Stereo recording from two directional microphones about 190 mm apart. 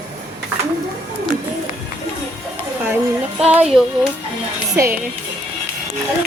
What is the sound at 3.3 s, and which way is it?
Music, 5° right (ahead or behind).